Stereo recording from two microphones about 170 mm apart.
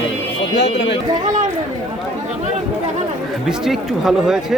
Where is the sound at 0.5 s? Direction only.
80° left.